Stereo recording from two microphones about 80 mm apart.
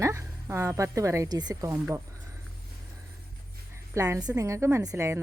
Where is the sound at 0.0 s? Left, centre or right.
Right.